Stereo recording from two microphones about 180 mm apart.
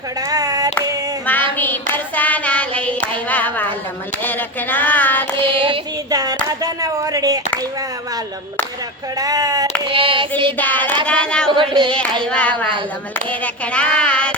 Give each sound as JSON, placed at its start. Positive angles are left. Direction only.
{"t": 0.3, "sound": "clapping", "side_deg": -20}
{"t": 1.5, "sound": "hands", "side_deg": 10}
{"t": 5.6, "sound": "speech", "side_deg": -25}
{"t": 9.1, "sound": "speech", "side_deg": -20}
{"t": 9.8, "sound": "female singing", "side_deg": -30}
{"t": 10.6, "sound": "hands", "side_deg": 10}
{"t": 11.0, "sound": "a sound", "side_deg": 5}
{"t": 11.4, "sound": "child singing", "side_deg": -30}
{"t": 11.9, "sound": "hands", "side_deg": 5}